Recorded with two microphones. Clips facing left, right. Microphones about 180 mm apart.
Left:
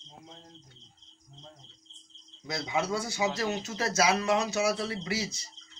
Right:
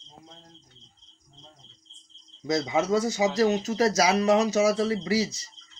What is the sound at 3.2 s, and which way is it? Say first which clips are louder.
Speech: right 7 dB; 35° right (ahead or behind).